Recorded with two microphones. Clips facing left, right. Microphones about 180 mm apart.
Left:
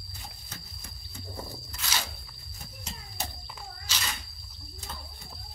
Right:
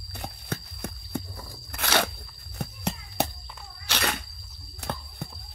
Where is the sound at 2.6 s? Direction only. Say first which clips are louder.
Right 12 dB; 65° right (ahead or behind).